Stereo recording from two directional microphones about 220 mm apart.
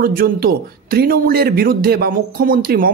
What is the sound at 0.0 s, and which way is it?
A man's voice, 40° right (ahead or behind).